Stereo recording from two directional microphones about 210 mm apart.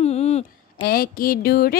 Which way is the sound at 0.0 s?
30° left (ahead or behind).